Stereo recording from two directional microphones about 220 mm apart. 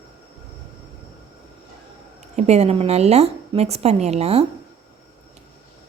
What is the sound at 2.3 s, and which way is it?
A woman's voice, 30° right (ahead or behind).